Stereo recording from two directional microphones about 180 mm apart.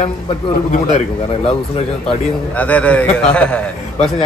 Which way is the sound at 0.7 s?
40° left (ahead or behind).